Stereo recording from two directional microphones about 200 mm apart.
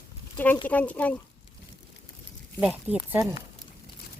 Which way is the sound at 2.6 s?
5° right (ahead or behind).